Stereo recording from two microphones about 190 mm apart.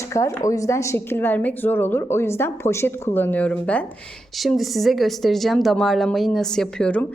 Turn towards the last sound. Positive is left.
turn(degrees=5)  # may be behind; listen again after turning